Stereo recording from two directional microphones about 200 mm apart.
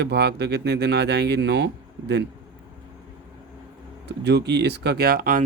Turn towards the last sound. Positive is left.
turn(degrees=-45)  # may be behind; listen again after turning